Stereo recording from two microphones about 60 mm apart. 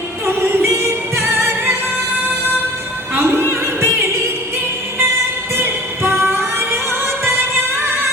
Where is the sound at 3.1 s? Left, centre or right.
Right.